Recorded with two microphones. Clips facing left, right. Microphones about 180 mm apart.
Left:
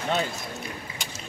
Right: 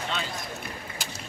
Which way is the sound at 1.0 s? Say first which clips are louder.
Even; centre (ahead or behind).